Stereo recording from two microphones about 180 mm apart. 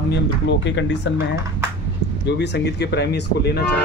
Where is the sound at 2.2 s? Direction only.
70° left (ahead or behind).